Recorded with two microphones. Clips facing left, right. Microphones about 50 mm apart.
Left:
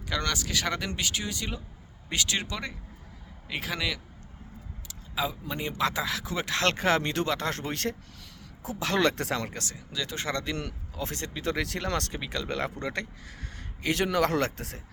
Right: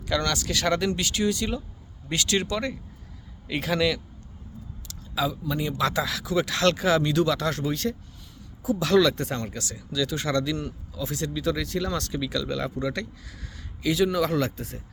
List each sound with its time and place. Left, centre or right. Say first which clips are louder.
0.1 s speech: right 4 dB; centre
4.9 s a sound: right 4 dB; left
5.5 s speech: right 3 dB; left
7.7 s speech: right 4 dB; left
8.6 s speech: right 7 dB; left
9.1 s speech: even; left
9.5 s speech: right 2 dB; left
9.7 s speech: right 9 dB; left
10.5 s speech: right 4 dB; left
11.2 s speech: right 6 dB; left
11.5 s speech: right 2 dB; left
12.5 s speech: right 3 dB; left
12.9 s a man's voice: right 2 dB; left
14.1 s speech: right 1 dB; left